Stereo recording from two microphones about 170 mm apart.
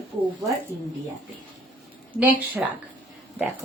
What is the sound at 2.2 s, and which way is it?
Speech, 10° right (ahead or behind).